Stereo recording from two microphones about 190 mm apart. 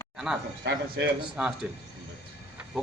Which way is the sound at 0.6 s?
60° right (ahead or behind).